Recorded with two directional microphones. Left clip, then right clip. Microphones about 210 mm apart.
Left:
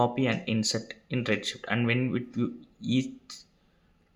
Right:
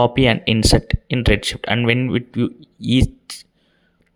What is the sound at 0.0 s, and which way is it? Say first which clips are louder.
Speech: right 11 dB; 45° right (ahead or behind).